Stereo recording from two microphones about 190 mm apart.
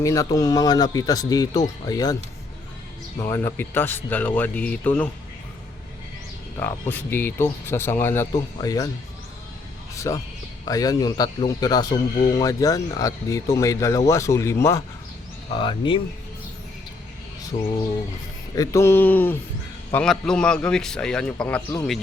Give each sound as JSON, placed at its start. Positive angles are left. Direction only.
{"t": 0.0, "sound": "a man's voice", "side_deg": 15}
{"t": 3.2, "sound": "speech", "side_deg": 15}
{"t": 6.6, "sound": "a man's voice", "side_deg": 10}
{"t": 9.9, "sound": "a man's voice", "side_deg": 15}
{"t": 15.5, "sound": "a man's voice", "side_deg": 25}
{"t": 17.5, "sound": "a man's voice", "side_deg": 25}